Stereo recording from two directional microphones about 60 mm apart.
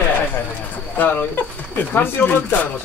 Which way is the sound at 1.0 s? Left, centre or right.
Left.